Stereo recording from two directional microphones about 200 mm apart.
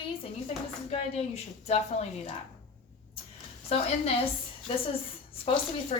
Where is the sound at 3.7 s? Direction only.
30° left (ahead or behind).